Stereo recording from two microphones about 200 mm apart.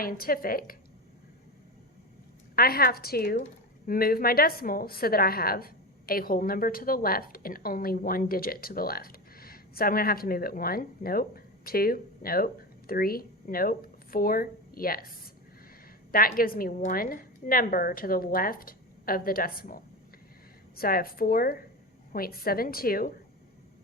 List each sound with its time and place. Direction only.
0.0 s a woman's voice: 45° left (ahead or behind)
2.6 s a woman's voice: 50° left (ahead or behind)
16.1 s a woman's voice: 45° left (ahead or behind)